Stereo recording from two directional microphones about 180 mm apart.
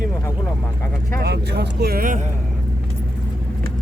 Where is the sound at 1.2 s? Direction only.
70° right (ahead or behind); by 2.2 s 50° right (ahead or behind).